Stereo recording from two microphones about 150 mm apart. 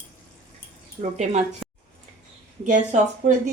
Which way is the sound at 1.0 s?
45° right (ahead or behind).